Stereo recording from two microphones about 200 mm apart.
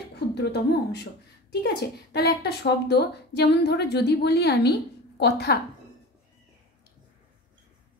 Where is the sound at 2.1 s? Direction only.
55° left (ahead or behind).